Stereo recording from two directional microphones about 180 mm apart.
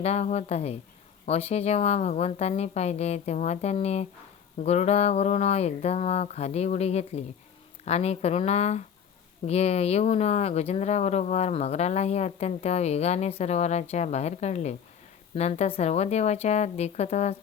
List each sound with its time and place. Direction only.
0.0 s speech: 35° left (ahead or behind)